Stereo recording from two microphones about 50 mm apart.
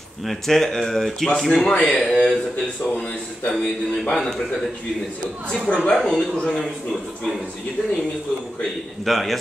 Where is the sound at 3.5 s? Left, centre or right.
Centre.